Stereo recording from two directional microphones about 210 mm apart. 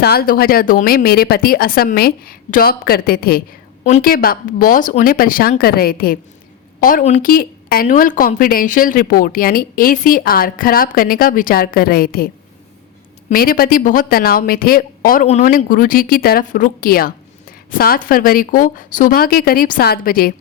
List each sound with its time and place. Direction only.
0.0 s speech: 45° left (ahead or behind)
13.3 s speech: 45° left (ahead or behind)